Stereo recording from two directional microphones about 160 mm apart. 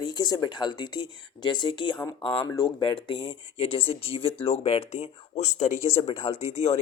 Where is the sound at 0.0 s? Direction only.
25° left (ahead or behind).